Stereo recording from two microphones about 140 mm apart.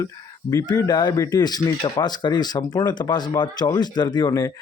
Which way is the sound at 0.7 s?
30° left (ahead or behind).